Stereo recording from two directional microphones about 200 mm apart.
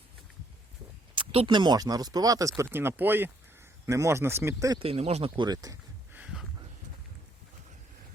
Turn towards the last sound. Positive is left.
turn(degrees=-5)  # may be behind; listen again after turning